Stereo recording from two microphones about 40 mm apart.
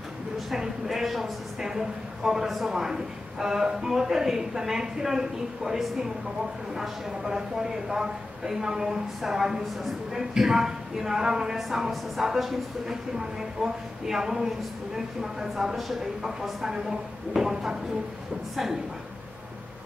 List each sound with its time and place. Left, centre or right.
0.5 s speech: centre
16.2 s speech: centre